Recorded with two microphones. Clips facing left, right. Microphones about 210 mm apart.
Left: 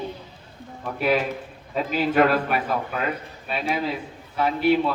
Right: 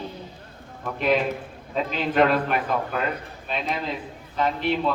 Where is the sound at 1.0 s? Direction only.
5° left (ahead or behind).